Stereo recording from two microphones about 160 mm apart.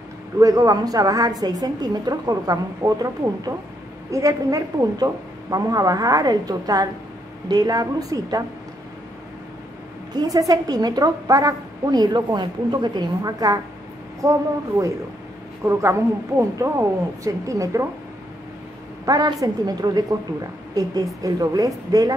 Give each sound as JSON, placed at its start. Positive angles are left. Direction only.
{"t": 0.4, "sound": "a woman's voice", "side_deg": -20}
{"t": 10.1, "sound": "a woman's voice", "side_deg": -20}
{"t": 19.0, "sound": "a woman's voice", "side_deg": -25}